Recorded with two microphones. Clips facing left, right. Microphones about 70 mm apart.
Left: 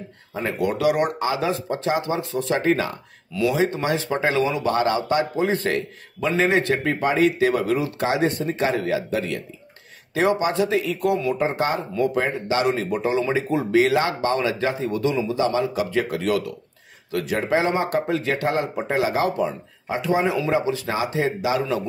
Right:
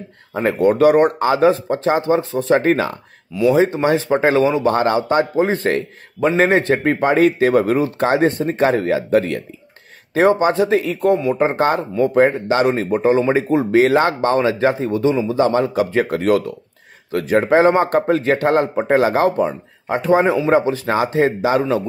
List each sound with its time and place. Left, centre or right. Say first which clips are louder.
0.3 s a man's voice: right 8 dB; right
2.6 s a man's voice: right 4 dB; right
3.5 s a man's voice: right 7 dB; right
11.3 s a man's voice: right 6 dB; right
15.3 s a man's voice: right 6 dB; right